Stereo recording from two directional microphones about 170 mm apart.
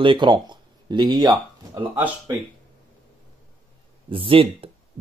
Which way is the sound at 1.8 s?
10° right (ahead or behind).